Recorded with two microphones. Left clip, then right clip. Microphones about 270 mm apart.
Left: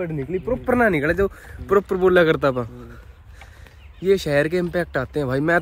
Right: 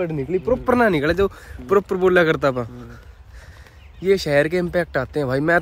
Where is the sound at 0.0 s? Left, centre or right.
Centre.